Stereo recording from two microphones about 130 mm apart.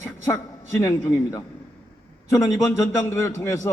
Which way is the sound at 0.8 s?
20° left (ahead or behind).